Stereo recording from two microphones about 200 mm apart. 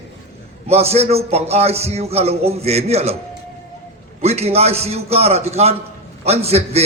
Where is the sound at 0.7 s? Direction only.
30° right (ahead or behind).